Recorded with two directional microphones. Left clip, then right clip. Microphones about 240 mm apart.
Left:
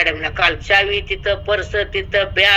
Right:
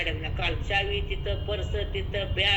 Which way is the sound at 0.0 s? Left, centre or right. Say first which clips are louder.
Left 14 dB; left.